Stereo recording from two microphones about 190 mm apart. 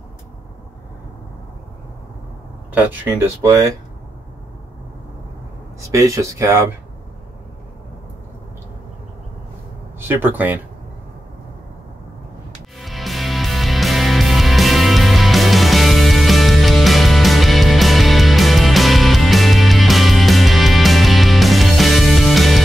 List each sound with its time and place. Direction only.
2.7 s speech: 10° right (ahead or behind)
5.8 s speech: 15° right (ahead or behind)
9.9 s speech: 10° right (ahead or behind)
12.7 s music: centre (ahead or behind)